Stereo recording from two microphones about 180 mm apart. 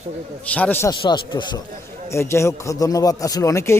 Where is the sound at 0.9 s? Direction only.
25° left (ahead or behind).